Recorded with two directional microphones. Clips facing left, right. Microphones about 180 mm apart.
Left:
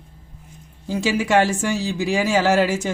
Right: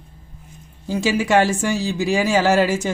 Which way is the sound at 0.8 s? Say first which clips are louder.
Right 1 dB; 40° right (ahead or behind).